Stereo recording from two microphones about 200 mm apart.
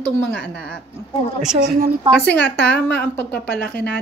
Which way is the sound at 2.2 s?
55° left (ahead or behind).